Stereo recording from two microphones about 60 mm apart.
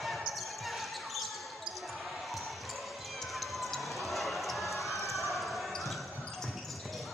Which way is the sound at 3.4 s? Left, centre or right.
Centre.